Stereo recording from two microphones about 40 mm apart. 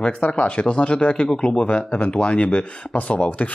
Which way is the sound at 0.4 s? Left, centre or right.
Left.